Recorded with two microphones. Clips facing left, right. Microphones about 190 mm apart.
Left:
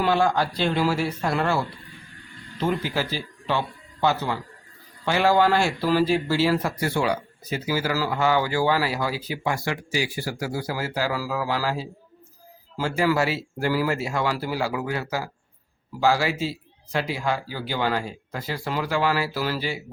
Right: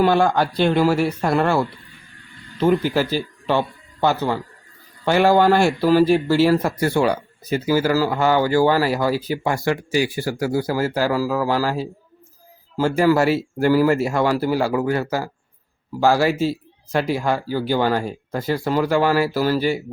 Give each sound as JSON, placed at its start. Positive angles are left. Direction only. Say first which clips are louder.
{"t": 0.0, "sound": "a man's voice", "louder": "right 5 dB", "side_deg": -50}
{"t": 2.6, "sound": "a man's voice", "louder": "right 8 dB", "side_deg": -50}